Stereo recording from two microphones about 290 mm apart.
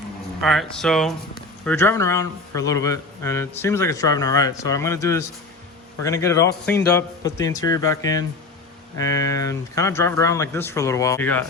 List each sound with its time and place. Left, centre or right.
0.4 s a man's voice: centre